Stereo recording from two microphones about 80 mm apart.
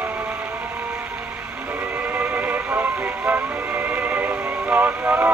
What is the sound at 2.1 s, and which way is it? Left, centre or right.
Music, centre.